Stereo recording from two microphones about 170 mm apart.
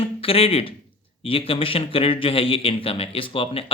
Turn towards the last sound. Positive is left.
turn(degrees=35)  # may be behind; listen again after turning